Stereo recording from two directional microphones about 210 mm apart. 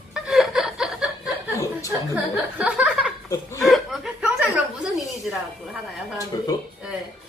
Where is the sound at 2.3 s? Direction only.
5° right (ahead or behind).